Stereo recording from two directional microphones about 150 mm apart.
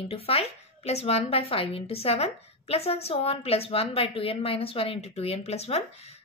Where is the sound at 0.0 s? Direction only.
40° left (ahead or behind).